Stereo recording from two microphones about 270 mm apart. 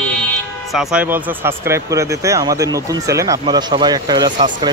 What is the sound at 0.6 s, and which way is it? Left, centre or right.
Speech, centre.